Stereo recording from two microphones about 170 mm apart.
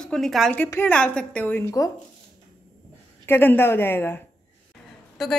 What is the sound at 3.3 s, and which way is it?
Speech, 15° left (ahead or behind).